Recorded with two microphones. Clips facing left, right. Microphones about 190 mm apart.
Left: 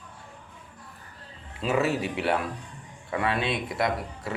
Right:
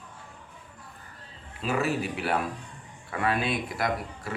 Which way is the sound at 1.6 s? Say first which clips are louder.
Left 2 dB; 25° left (ahead or behind).